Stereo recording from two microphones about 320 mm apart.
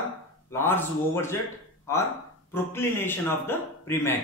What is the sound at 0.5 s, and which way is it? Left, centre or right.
Speech, centre.